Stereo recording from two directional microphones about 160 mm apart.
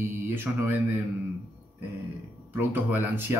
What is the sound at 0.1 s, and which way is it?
Speech, 15° right (ahead or behind).